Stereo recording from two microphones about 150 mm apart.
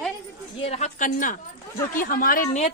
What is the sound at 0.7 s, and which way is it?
A woman's voice, 50° left (ahead or behind).